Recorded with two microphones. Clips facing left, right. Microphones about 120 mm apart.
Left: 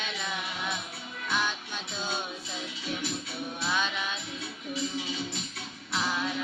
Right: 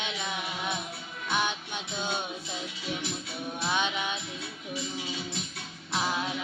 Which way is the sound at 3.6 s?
20° right (ahead or behind).